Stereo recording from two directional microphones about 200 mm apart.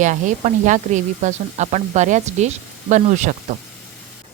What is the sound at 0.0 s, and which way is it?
Speech, 40° right (ahead or behind).